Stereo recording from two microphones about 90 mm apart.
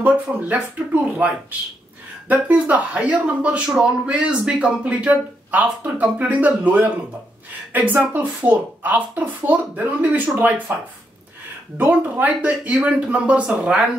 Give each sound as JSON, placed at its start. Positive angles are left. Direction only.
{"t": 0.0, "sound": "a woman's voice", "side_deg": -15}
{"t": 11.8, "sound": "speech", "side_deg": -20}